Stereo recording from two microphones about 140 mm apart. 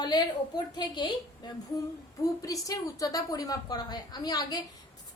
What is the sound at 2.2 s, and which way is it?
A woman's voice, 25° left (ahead or behind).